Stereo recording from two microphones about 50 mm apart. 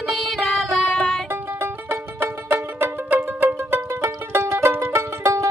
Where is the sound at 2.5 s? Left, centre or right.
Right.